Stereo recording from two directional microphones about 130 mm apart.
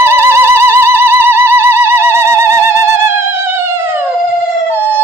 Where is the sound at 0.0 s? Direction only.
20° right (ahead or behind).